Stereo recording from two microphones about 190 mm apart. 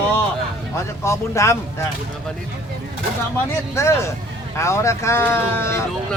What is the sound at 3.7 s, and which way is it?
Speech, 15° left (ahead or behind).